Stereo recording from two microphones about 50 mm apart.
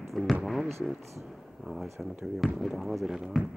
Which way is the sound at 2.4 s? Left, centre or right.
Centre.